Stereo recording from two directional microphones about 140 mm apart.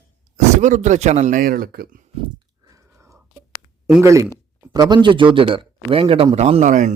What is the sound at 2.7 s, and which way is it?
Chewing, 20° right (ahead or behind).